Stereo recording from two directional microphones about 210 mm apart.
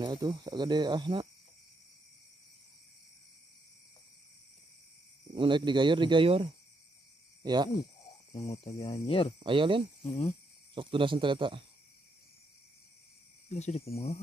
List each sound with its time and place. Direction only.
0.0 s speech: 20° right (ahead or behind)
5.3 s speech: 25° right (ahead or behind)
8.7 s speech: 20° left (ahead or behind)
9.4 s speech: 25° right (ahead or behind)
13.5 s speech: 30° left (ahead or behind)